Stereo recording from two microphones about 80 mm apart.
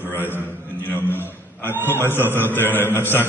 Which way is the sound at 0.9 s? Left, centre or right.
Left.